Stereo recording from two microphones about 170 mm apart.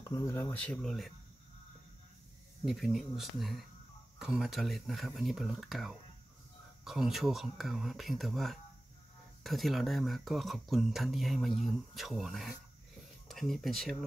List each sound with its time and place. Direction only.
0.0 s speech: 20° left (ahead or behind); by 1.1 s centre (ahead or behind)
2.6 s speech: centre (ahead or behind)